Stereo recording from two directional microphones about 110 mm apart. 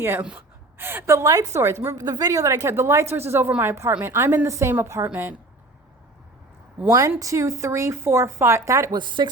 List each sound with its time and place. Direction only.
0.0 s a woman's voice: 20° right (ahead or behind)
7.2 s a woman's voice: 30° right (ahead or behind)
9.0 s speech: 45° right (ahead or behind)